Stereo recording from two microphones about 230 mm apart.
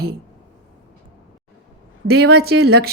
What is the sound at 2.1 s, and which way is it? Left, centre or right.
Speech, right.